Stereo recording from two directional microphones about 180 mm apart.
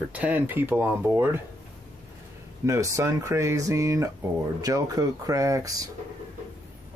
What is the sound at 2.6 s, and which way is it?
Speech, 15° right (ahead or behind).